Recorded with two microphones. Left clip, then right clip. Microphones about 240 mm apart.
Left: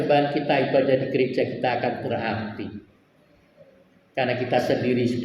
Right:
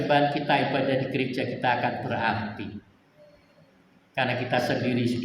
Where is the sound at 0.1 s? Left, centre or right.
Right.